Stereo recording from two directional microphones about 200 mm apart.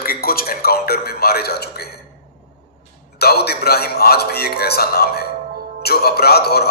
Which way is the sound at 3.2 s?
50° left (ahead or behind).